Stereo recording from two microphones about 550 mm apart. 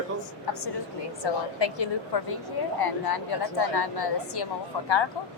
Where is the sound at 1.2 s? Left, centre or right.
Left.